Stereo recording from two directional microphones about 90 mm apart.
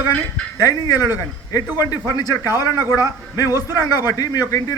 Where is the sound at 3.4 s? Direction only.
30° right (ahead or behind).